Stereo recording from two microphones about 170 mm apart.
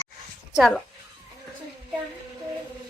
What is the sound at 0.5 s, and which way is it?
Speech, centre (ahead or behind).